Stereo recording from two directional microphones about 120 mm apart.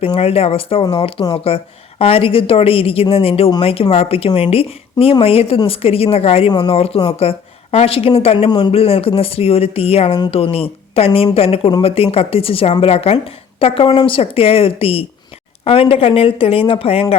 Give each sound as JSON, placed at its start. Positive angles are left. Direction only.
{"t": 0.0, "sound": "a woman's voice", "side_deg": 55}
{"t": 8.4, "sound": "speech", "side_deg": 35}
{"t": 8.7, "sound": "a woman's voice", "side_deg": 55}